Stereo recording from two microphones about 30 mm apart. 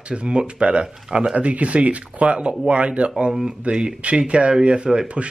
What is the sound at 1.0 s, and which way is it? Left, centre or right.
Speech, right.